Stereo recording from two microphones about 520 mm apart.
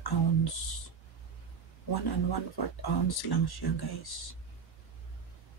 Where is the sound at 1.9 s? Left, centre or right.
Left.